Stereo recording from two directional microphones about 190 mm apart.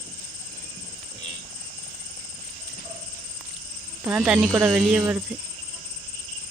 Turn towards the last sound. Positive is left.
turn(degrees=-5)  # may be behind; listen again after turning